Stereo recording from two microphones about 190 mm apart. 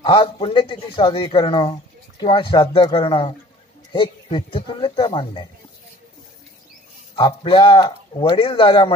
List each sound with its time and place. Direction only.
0.0 s speech: 25° left (ahead or behind)
7.2 s speech: 25° left (ahead or behind)